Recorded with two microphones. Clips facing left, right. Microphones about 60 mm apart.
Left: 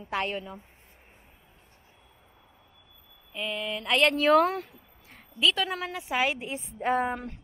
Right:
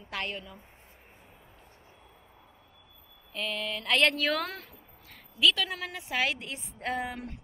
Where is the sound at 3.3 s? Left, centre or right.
Centre.